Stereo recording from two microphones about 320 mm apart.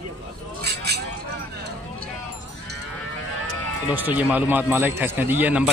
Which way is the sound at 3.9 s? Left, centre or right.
Centre.